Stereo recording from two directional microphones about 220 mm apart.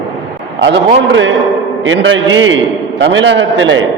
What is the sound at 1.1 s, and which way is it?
A man's voice, 60° right (ahead or behind).